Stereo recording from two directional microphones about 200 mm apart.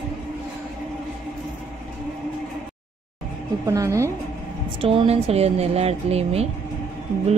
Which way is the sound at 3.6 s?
15° right (ahead or behind).